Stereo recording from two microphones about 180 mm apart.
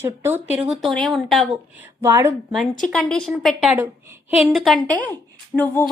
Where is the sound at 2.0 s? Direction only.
15° right (ahead or behind).